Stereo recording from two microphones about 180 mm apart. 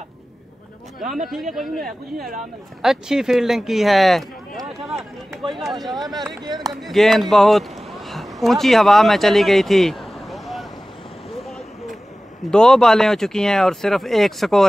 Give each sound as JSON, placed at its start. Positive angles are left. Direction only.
{"t": 1.1, "sound": "speech", "side_deg": 0}
{"t": 5.5, "sound": "speech", "side_deg": 0}
{"t": 6.4, "sound": "speech", "side_deg": -25}
{"t": 6.7, "sound": "speech", "side_deg": 0}
{"t": 12.4, "sound": "speech", "side_deg": 5}